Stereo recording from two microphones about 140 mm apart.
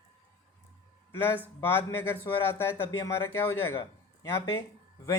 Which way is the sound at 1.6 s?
15° left (ahead or behind).